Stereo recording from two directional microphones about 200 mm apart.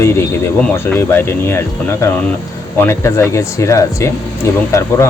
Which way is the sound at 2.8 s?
15° left (ahead or behind).